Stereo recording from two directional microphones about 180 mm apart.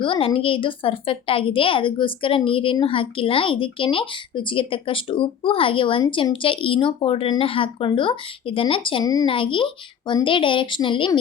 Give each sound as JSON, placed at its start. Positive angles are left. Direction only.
{"t": 0.0, "sound": "a woman's voice", "side_deg": 30}